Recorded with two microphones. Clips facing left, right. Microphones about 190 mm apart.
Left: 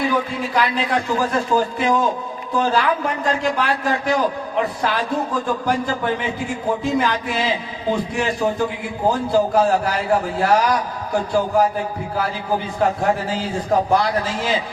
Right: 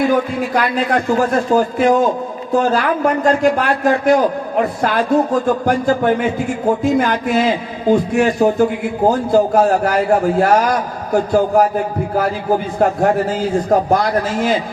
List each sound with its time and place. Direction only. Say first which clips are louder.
0.1 s a man's voice: right 5 dB; 50° right (ahead or behind)
12.8 s a man's voice: right 4 dB; 45° right (ahead or behind)